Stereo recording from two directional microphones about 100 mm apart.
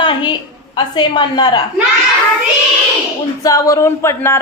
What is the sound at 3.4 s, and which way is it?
Speech, 35° left (ahead or behind).